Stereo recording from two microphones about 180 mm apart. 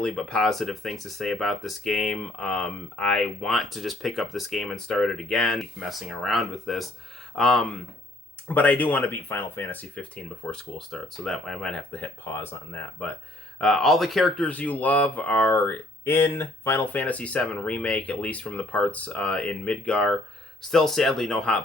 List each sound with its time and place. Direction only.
0.0 s speech: 5° left (ahead or behind)